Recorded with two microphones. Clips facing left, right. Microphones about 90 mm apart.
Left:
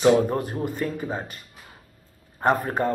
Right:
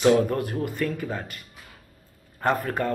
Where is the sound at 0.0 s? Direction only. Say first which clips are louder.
Left 1 dB; 25° left (ahead or behind).